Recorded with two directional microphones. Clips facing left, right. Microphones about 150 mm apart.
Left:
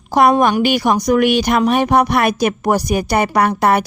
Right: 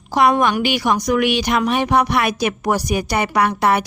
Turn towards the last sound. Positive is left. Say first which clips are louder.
# left 3 dB
turn(degrees=45)  # may be behind; listen again after turning